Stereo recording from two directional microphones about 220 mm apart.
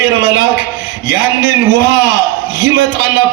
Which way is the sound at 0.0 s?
50° right (ahead or behind).